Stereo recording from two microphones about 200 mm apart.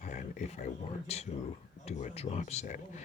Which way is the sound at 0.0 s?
40° left (ahead or behind).